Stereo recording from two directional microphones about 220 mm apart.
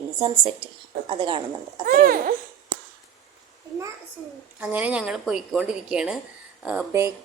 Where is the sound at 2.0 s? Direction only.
40° right (ahead or behind).